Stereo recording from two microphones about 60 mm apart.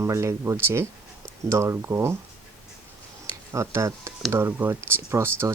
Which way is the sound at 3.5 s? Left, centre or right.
Right.